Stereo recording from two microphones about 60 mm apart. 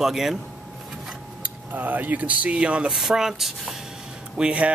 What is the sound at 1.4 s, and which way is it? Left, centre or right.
Speech, right.